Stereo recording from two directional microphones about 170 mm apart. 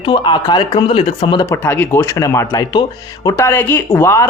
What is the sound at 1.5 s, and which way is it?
Speech, 10° left (ahead or behind).